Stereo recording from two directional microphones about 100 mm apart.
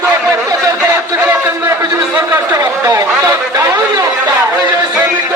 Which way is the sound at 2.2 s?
25° right (ahead or behind).